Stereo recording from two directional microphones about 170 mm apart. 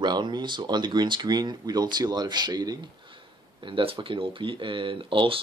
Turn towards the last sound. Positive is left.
turn(degrees=-30)  # may be behind; listen again after turning